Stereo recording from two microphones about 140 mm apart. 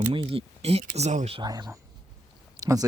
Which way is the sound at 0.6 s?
45° right (ahead or behind).